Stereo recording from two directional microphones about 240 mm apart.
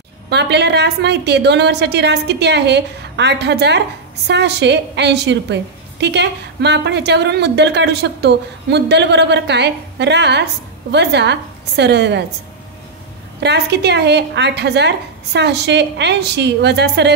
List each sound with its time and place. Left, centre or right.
0.3 s a woman's voice: right
13.4 s a woman's voice: right